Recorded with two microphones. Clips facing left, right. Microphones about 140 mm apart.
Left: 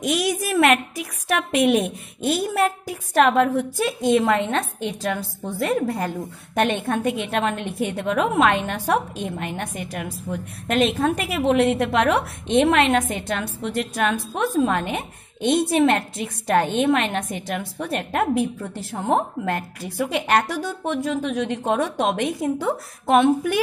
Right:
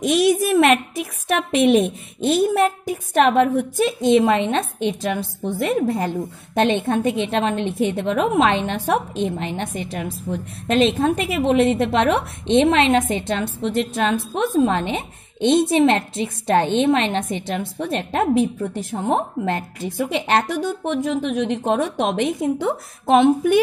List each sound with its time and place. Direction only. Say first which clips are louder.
0.0 s a woman's voice: right 6 dB; 25° right (ahead or behind)